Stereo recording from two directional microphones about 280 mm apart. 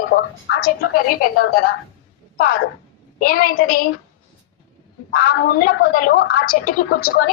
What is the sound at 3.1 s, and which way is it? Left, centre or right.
Speech, left.